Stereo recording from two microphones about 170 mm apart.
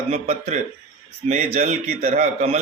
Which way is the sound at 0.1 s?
40° right (ahead or behind).